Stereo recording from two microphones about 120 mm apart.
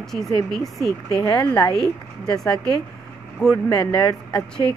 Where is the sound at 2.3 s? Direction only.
5° left (ahead or behind).